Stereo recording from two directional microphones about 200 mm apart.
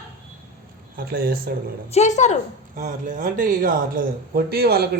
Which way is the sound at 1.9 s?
35° left (ahead or behind).